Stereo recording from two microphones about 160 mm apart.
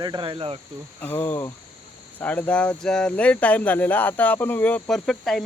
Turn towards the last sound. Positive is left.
turn(degrees=5)  # may be behind; listen again after turning